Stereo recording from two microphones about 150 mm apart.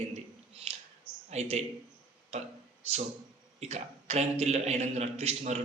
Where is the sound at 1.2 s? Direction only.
45° right (ahead or behind).